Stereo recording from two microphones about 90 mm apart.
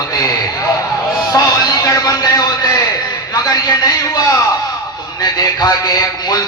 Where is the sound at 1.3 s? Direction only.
45° left (ahead or behind).